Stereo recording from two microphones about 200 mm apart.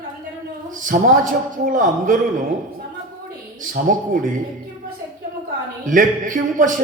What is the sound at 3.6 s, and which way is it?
Speech, 40° right (ahead or behind).